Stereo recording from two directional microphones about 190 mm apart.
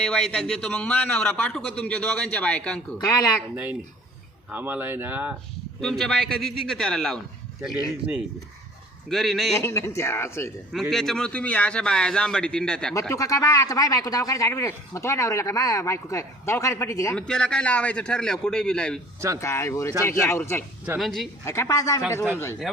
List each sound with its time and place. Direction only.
0.0 s a man's voice: 5° left (ahead or behind)
3.0 s speech: 20° left (ahead or behind)
3.5 s speech: 10° right (ahead or behind)
5.8 s a man's voice: centre (ahead or behind)
9.0 s a man's voice: centre (ahead or behind)
9.6 s speech: 15° left (ahead or behind)
10.7 s a man's voice: centre (ahead or behind)
12.9 s speech: 15° left (ahead or behind)
17.2 s a man's voice: 5° left (ahead or behind)
21.0 s a man's voice: centre (ahead or behind)
21.4 s speech: 15° left (ahead or behind)